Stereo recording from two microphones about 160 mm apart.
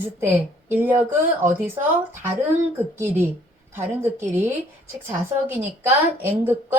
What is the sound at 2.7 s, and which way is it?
A woman's voice, 15° right (ahead or behind).